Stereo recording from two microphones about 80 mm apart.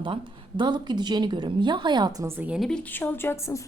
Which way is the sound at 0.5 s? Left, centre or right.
Right.